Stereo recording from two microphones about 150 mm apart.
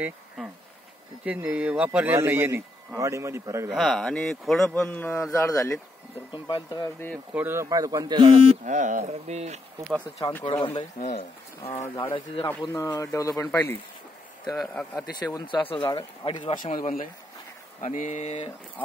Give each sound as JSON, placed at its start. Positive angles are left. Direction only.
{"t": 1.2, "sound": "a man's voice", "side_deg": -10}
{"t": 3.7, "sound": "speech", "side_deg": 0}
{"t": 4.8, "sound": "a man's voice", "side_deg": 15}
{"t": 6.3, "sound": "speech", "side_deg": 30}
{"t": 7.3, "sound": "speech", "side_deg": -15}
{"t": 8.6, "sound": "speech", "side_deg": -60}
{"t": 10.2, "sound": "speech", "side_deg": 35}
{"t": 11.1, "sound": "speech", "side_deg": 45}
{"t": 12.4, "sound": "speech", "side_deg": 20}
{"t": 15.0, "sound": "speech", "side_deg": 25}
{"t": 16.5, "sound": "speech", "side_deg": 60}